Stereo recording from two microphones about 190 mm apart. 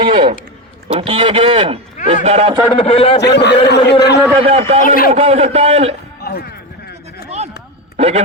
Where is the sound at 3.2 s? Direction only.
60° left (ahead or behind).